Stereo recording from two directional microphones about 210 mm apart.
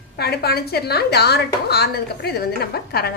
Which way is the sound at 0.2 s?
50° left (ahead or behind).